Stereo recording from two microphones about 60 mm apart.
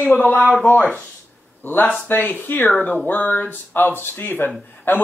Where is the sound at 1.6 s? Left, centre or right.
Left.